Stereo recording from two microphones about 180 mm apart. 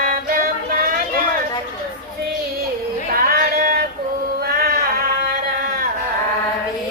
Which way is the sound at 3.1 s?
55° right (ahead or behind).